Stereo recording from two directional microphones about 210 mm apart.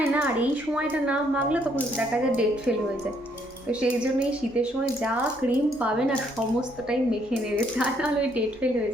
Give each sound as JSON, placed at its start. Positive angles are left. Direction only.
{"t": 0.0, "sound": "a woman's voice", "side_deg": -5}
{"t": 7.8, "sound": "speech", "side_deg": -5}